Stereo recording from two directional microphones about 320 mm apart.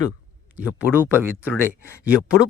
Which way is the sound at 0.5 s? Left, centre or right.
Centre.